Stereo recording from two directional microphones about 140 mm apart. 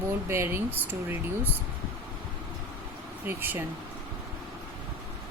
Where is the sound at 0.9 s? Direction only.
15° right (ahead or behind).